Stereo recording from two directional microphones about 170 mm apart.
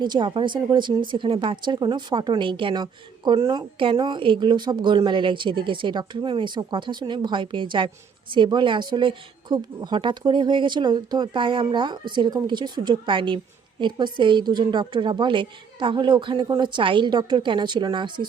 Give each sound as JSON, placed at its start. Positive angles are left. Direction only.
{"t": 0.0, "sound": "a woman's voice", "side_deg": -30}